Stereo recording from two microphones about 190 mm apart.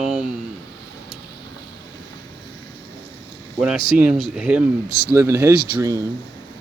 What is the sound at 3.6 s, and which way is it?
Speech, 5° right (ahead or behind).